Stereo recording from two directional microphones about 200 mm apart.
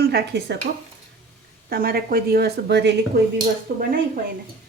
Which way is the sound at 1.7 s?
50° right (ahead or behind).